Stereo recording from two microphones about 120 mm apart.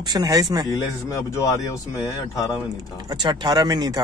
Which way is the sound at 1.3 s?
25° left (ahead or behind).